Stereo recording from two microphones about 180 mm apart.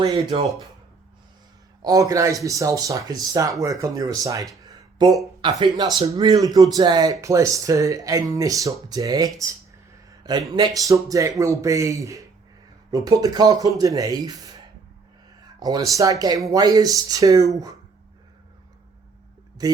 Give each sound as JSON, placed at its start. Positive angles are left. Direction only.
{"t": 0.0, "sound": "speech", "side_deg": -25}
{"t": 1.8, "sound": "speech", "side_deg": -20}
{"t": 10.5, "sound": "speech", "side_deg": -20}
{"t": 19.6, "sound": "speech", "side_deg": -20}